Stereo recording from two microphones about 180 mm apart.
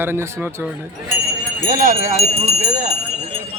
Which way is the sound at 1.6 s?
45° right (ahead or behind).